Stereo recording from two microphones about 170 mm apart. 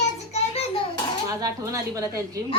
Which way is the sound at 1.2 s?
20° right (ahead or behind).